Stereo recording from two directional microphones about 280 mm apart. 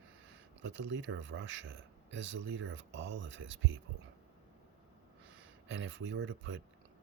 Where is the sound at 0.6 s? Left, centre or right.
Right.